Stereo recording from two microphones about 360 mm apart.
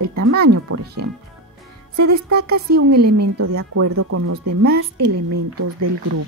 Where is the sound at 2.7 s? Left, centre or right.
Right.